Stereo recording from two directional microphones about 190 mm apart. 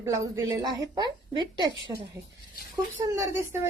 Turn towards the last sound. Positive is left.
turn(degrees=-15)  # may be behind; listen again after turning